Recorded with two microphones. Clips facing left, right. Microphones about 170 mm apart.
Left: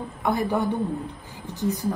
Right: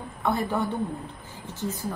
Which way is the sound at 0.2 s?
15° left (ahead or behind).